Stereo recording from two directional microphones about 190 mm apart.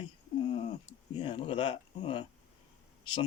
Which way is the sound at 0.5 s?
30° left (ahead or behind).